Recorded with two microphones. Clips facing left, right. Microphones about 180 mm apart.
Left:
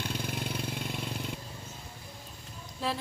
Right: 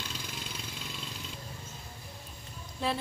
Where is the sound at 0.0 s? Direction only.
60° left (ahead or behind).